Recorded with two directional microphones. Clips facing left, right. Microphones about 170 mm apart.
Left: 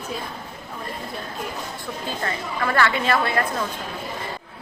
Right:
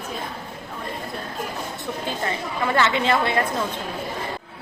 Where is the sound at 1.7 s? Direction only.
20° right (ahead or behind).